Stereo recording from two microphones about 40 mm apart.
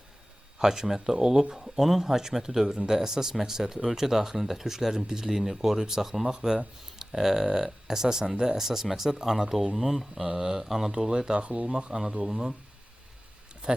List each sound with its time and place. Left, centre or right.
0.6 s speech: centre
10.2 s speech: centre
11.3 s speech: right
11.9 s speech: centre
13.6 s a sound: right